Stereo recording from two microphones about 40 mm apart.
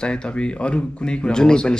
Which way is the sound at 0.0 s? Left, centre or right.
Left.